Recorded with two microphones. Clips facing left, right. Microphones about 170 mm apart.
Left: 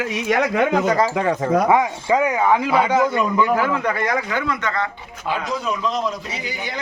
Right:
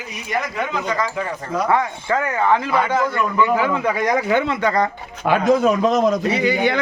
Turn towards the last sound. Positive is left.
turn(degrees=-65)  # may be behind; listen again after turning